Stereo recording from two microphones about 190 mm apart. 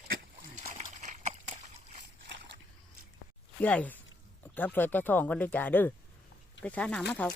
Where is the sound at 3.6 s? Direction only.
10° left (ahead or behind).